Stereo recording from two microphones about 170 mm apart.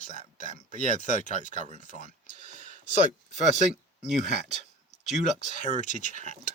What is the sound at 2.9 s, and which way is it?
Speech, 45° left (ahead or behind).